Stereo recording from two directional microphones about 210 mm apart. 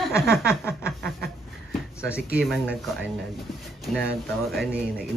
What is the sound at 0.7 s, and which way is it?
Speech, centre (ahead or behind).